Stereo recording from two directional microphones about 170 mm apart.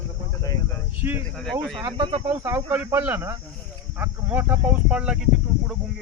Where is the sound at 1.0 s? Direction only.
15° right (ahead or behind).